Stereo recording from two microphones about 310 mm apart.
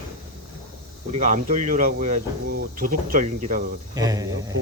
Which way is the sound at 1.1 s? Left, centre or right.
Right.